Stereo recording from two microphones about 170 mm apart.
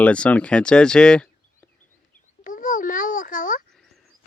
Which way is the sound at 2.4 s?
50° left (ahead or behind).